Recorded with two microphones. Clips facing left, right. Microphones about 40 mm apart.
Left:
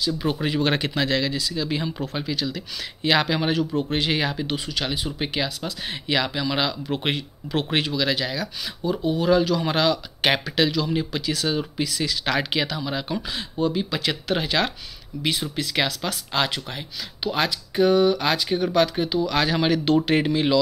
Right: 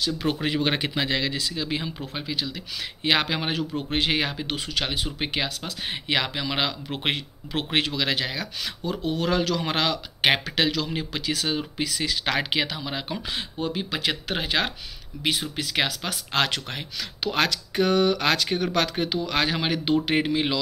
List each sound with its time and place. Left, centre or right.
0.0 s speech: right
0.4 s speech: right
0.7 s speech: centre
2.1 s speech: centre
2.5 s speech: right
4.6 s speech: right
9.0 s speech: right
9.6 s speech: right
13.3 s speech: right
16.1 s speech: right
16.4 s speech: right
19.2 s speech: right
19.6 s speech: centre